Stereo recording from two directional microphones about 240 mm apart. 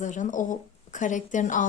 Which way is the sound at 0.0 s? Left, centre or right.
Left.